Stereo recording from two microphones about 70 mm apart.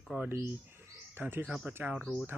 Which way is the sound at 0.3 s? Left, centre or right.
Right.